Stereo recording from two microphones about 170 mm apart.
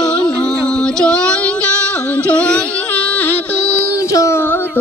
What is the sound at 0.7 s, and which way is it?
Female singing, 5° left (ahead or behind).